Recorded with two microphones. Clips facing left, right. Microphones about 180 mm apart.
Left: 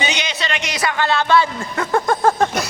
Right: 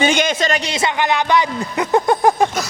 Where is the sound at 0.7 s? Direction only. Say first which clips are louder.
Right 1 dB; 25° right (ahead or behind).